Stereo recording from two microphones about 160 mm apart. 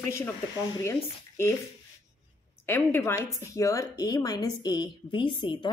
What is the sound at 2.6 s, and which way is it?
Speech, 15° left (ahead or behind).